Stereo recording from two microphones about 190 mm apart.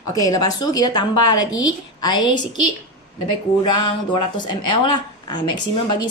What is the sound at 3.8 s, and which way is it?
Speech, 25° left (ahead or behind).